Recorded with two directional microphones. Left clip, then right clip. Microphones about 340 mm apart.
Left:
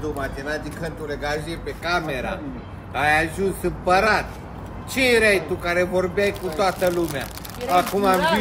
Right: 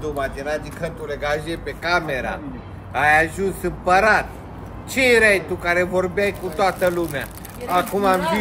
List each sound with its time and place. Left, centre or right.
0.2 s speech: centre
0.8 s speech: right
1.5 s speech: centre